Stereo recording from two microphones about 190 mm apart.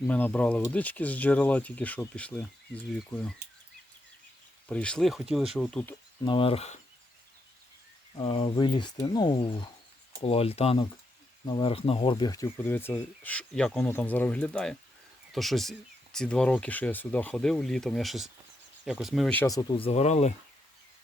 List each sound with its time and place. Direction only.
0.1 s speech: 10° left (ahead or behind)
4.7 s speech: 5° left (ahead or behind)
6.2 s speech: 30° left (ahead or behind)
8.2 s speech: 30° left (ahead or behind)
12.5 s speech: 10° left (ahead or behind)
19.4 s speech: 20° left (ahead or behind); by 20.3 s 35° left (ahead or behind)